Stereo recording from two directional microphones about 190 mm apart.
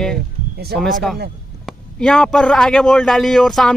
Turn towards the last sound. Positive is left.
turn(degrees=0)  # may be behind; listen again after turning